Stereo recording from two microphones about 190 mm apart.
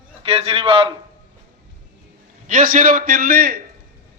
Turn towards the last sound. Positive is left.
turn(degrees=-50)  # may be behind; listen again after turning